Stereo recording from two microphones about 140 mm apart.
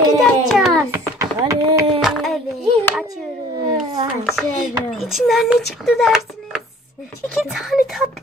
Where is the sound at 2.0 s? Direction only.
Centre (ahead or behind).